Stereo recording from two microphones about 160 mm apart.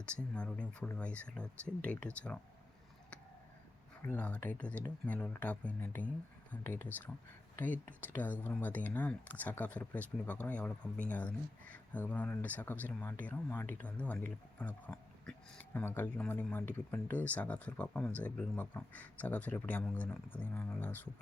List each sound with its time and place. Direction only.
0.0 s speech: 5° left (ahead or behind)
4.0 s speech: 10° left (ahead or behind)